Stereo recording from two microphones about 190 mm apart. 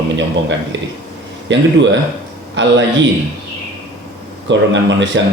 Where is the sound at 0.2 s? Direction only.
70° right (ahead or behind).